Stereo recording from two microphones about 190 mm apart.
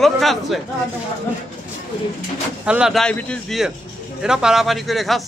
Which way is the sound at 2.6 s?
5° right (ahead or behind).